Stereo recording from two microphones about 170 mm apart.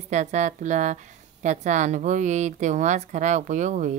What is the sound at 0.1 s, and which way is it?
Speech, 45° right (ahead or behind).